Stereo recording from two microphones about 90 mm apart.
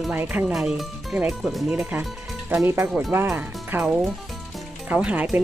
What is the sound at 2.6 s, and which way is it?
Speech, 25° right (ahead or behind).